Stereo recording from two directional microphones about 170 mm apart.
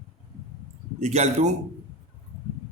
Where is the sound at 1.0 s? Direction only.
45° right (ahead or behind).